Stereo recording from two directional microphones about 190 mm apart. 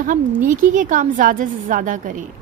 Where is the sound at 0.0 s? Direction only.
45° right (ahead or behind).